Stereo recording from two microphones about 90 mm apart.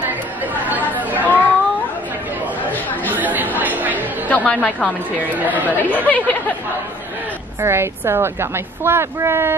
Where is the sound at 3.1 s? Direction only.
20° right (ahead or behind).